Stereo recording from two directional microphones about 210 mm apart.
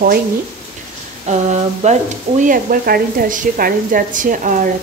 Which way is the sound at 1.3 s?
35° right (ahead or behind).